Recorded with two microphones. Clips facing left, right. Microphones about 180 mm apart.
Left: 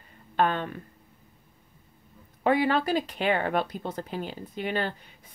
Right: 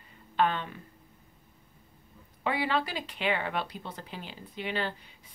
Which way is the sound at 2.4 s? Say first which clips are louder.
Left 6 dB; 45° left (ahead or behind).